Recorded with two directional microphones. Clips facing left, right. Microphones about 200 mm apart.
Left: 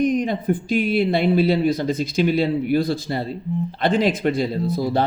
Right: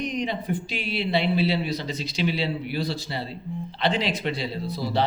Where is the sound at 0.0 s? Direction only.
50° left (ahead or behind).